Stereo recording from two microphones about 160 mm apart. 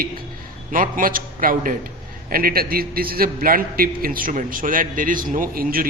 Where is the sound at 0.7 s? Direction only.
60° right (ahead or behind).